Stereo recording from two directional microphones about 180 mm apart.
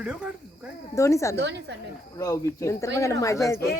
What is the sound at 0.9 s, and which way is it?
Speech, 15° left (ahead or behind).